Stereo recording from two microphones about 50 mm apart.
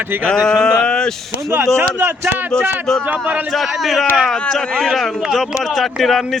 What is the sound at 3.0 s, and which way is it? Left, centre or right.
Speech, right.